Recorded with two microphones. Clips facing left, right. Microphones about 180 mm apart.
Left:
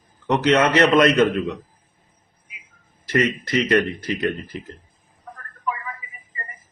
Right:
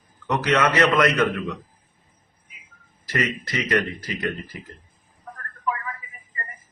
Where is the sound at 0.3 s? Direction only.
25° left (ahead or behind).